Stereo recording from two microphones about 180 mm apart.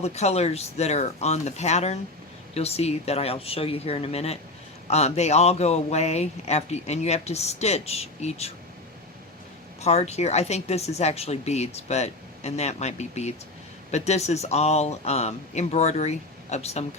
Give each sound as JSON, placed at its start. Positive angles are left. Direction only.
{"t": 0.0, "sound": "speech", "side_deg": 35}
{"t": 9.8, "sound": "speech", "side_deg": 35}